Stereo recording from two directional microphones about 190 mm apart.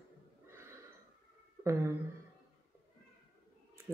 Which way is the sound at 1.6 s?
15° right (ahead or behind).